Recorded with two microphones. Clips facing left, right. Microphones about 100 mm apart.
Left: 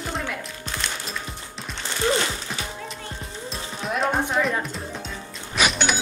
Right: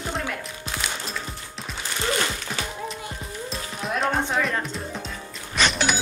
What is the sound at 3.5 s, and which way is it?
Music, centre (ahead or behind).